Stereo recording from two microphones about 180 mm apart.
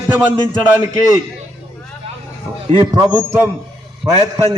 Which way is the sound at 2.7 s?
20° right (ahead or behind).